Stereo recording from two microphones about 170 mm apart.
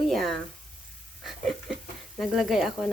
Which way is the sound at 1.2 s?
Centre (ahead or behind).